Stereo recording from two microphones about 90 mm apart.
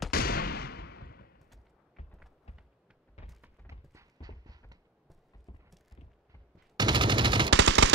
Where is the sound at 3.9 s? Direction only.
45° right (ahead or behind).